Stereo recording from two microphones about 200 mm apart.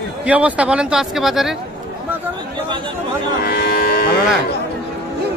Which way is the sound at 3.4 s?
50° left (ahead or behind).